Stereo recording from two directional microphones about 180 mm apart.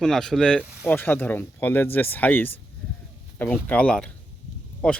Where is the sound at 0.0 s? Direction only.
5° left (ahead or behind).